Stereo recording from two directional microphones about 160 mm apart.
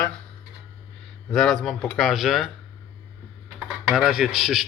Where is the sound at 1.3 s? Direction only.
Centre (ahead or behind).